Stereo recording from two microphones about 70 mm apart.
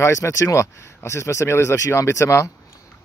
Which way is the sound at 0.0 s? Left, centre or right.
Left.